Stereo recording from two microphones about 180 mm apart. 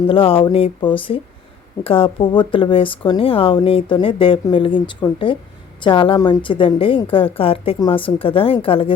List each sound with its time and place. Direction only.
0.1 s speech: 30° left (ahead or behind)